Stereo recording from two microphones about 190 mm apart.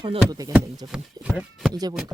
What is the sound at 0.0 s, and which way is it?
Speech, 25° right (ahead or behind).